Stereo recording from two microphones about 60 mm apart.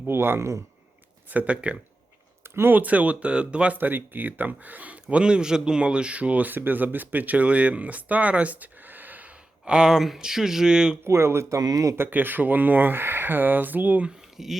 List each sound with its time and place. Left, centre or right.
0.1 s speech: right
1.3 s speech: right
2.6 s speech: right
3.8 s speech: right
5.0 s speech: centre
9.6 s speech: centre
11.0 s speech: right
11.9 s speech: right
14.3 s speech: centre